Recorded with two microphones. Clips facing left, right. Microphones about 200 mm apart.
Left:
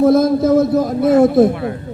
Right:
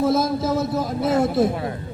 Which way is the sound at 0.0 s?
55° left (ahead or behind).